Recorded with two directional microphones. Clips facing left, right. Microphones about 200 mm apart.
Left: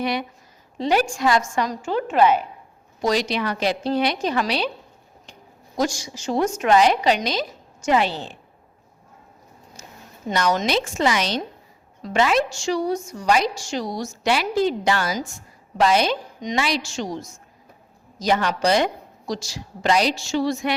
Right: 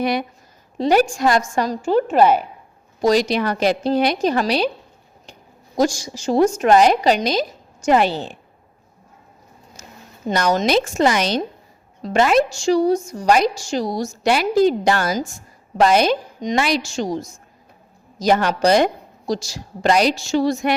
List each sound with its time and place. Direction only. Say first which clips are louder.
0.0 s a woman's voice: right 4 dB; 45° right (ahead or behind)
6.1 s a woman's voice: right 6 dB; 35° right (ahead or behind)
10.2 s a woman's voice: right 3 dB; 40° right (ahead or behind)